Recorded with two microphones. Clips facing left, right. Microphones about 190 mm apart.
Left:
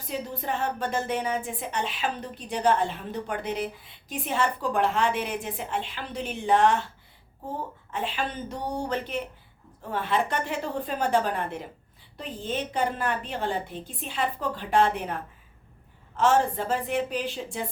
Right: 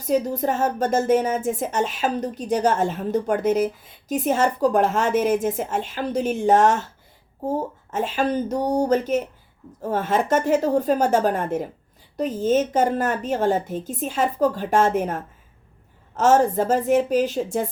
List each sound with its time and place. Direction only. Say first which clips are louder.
0.0 s speech: right 11 dB; 45° right (ahead or behind)